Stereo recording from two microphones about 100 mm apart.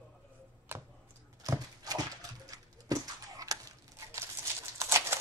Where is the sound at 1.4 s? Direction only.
40° right (ahead or behind).